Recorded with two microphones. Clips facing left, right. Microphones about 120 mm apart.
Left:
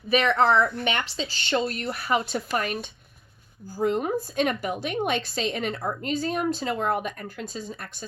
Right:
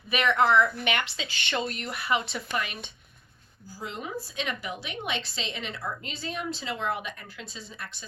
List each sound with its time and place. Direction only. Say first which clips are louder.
0.1 s a woman's voice: left 3 dB; 35° left (ahead or behind)